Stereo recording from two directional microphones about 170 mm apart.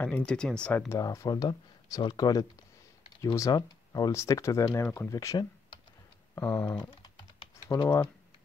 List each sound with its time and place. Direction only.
0.0 s speech: 10° left (ahead or behind)
6.7 s typing: 25° left (ahead or behind)